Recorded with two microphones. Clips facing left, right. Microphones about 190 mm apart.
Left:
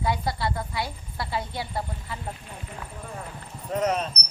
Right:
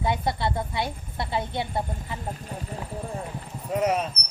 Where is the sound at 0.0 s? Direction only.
20° right (ahead or behind).